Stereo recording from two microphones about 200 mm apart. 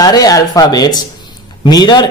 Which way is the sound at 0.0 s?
20° left (ahead or behind).